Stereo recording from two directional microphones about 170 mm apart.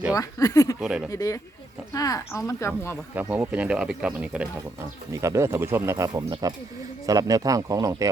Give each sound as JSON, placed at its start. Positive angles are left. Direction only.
{"t": 0.1, "sound": "speech", "side_deg": 20}
{"t": 0.8, "sound": "speech", "side_deg": -5}
{"t": 1.1, "sound": "speech", "side_deg": 20}
{"t": 3.2, "sound": "speech", "side_deg": -10}
{"t": 5.1, "sound": "speech", "side_deg": -15}